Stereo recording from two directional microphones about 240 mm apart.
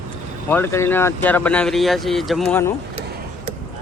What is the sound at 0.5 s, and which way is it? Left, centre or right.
Speech, centre.